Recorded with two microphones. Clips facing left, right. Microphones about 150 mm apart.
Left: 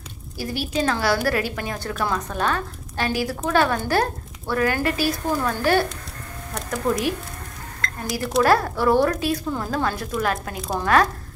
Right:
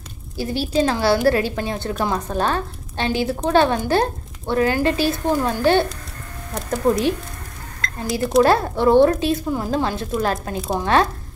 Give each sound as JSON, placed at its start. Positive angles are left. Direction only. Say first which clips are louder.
{"t": 0.4, "sound": "a woman's voice", "louder": "right 5 dB", "side_deg": -25}
{"t": 8.4, "sound": "a woman's voice", "louder": "right 3 dB", "side_deg": -25}